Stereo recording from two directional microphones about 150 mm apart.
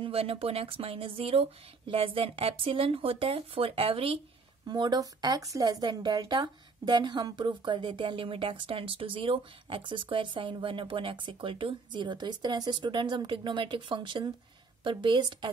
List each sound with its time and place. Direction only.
0.0 s speech: 40° right (ahead or behind)
4.6 s speech: 30° right (ahead or behind)